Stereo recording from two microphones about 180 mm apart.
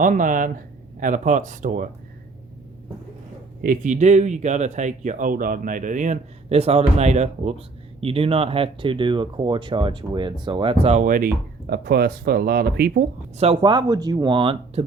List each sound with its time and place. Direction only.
0.0 s speech: 45° right (ahead or behind)
3.6 s speech: 45° right (ahead or behind)
13.3 s speech: 35° right (ahead or behind)